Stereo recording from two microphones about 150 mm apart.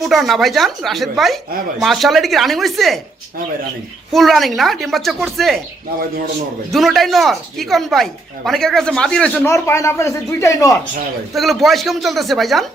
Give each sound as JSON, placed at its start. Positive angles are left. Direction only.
{"t": 0.0, "sound": "speech", "side_deg": 0}
{"t": 4.1, "sound": "speech", "side_deg": 0}
{"t": 6.7, "sound": "speech", "side_deg": 0}
{"t": 9.5, "sound": "speech", "side_deg": 20}
{"t": 11.3, "sound": "speech", "side_deg": 0}